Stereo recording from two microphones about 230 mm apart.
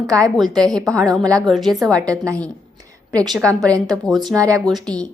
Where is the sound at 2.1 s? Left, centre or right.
Centre.